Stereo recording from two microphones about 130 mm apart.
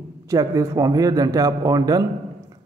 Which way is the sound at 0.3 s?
25° right (ahead or behind).